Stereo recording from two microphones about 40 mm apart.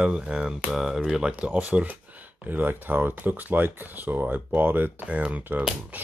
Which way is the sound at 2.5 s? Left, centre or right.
Right.